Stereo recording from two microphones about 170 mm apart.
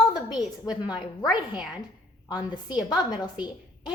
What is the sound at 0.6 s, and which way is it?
Speech, 25° left (ahead or behind).